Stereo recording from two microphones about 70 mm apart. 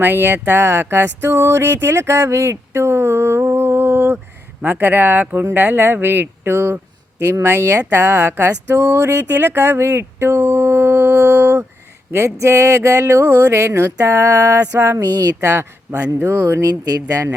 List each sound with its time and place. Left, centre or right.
0.0 s speech: right
12.1 s a sound: right
14.0 s speech: right
15.0 s speech: right
15.4 s speech: right
16.6 s speech: right